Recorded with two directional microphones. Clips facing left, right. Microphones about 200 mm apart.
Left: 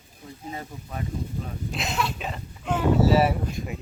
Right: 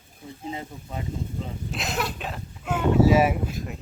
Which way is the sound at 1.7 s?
Centre (ahead or behind).